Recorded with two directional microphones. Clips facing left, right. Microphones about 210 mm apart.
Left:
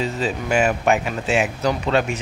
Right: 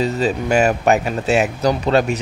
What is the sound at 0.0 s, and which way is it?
Speech, 40° right (ahead or behind).